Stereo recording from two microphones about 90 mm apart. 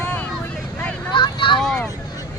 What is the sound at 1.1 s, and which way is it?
Vehicle, 65° left (ahead or behind).